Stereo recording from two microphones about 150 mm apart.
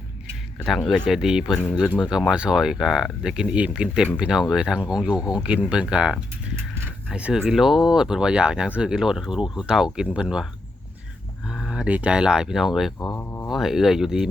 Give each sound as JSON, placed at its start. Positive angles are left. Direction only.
{"t": 0.6, "sound": "speech", "side_deg": 0}
{"t": 13.1, "sound": "a sound", "side_deg": 15}
{"t": 13.5, "sound": "speech", "side_deg": 0}